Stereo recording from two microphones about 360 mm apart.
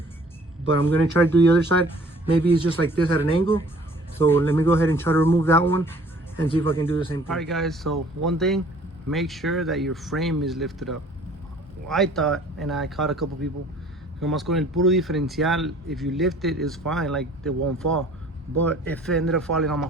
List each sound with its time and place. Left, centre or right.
0.6 s speech: right
0.9 s speech: centre
6.6 s speech: right
6.8 s speech: centre
17.6 s speech: right
18.6 s speech: centre